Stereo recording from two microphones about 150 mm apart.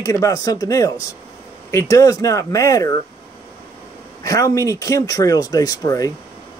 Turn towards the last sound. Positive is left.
turn(degrees=25)  # may be behind; listen again after turning